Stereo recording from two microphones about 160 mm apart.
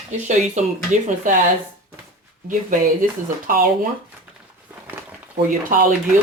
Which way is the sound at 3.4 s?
60° right (ahead or behind).